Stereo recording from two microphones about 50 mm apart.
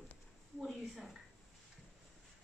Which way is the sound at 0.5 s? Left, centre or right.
Centre.